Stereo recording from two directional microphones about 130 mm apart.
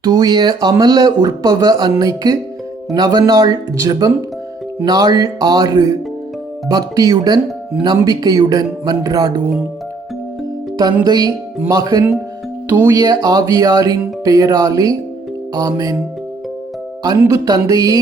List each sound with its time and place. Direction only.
0.0 s speech: 30° right (ahead or behind)
11.0 s speech: 30° right (ahead or behind)
17.0 s speech: 25° right (ahead or behind)